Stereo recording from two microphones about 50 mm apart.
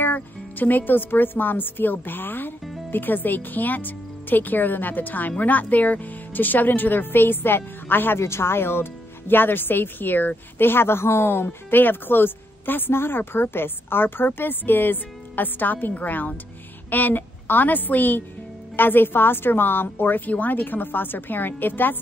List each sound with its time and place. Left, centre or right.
0.0 s speech: left
8.2 s a woman's voice: left